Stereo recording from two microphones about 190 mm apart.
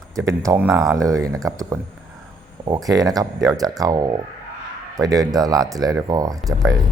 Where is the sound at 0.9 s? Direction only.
15° right (ahead or behind).